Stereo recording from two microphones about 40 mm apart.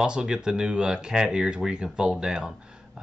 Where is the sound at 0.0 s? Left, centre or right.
Centre.